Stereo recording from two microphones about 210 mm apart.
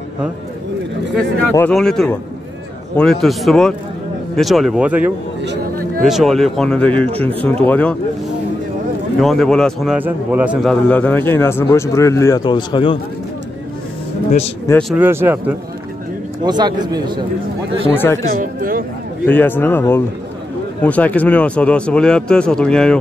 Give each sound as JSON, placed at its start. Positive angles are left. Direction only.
{"t": 1.5, "sound": "a man's voice", "side_deg": 5}
{"t": 5.4, "sound": "a sound", "side_deg": -55}
{"t": 6.0, "sound": "a man's voice", "side_deg": 0}
{"t": 9.2, "sound": "a man's voice", "side_deg": 0}
{"t": 14.7, "sound": "a man's voice", "side_deg": 0}
{"t": 15.0, "sound": "a man's voice", "side_deg": -10}
{"t": 17.9, "sound": "speech", "side_deg": 10}
{"t": 18.4, "sound": "a man's voice", "side_deg": -40}
{"t": 19.2, "sound": "a man's voice", "side_deg": 10}